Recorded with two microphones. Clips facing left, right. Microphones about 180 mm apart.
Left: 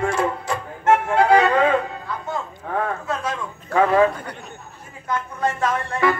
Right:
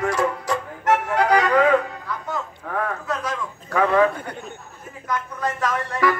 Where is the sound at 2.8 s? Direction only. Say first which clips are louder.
Even; 25° left (ahead or behind).